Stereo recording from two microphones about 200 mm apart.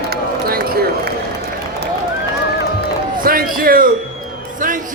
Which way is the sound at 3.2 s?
45° right (ahead or behind).